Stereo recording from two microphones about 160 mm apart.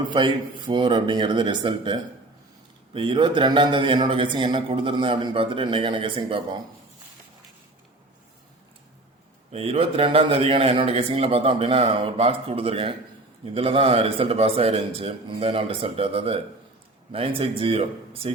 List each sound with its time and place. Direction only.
0.0 s a man's voice: 30° right (ahead or behind)
9.5 s a man's voice: 35° right (ahead or behind)